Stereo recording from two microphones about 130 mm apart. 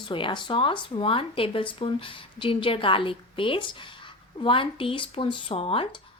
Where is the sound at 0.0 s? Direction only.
40° left (ahead or behind).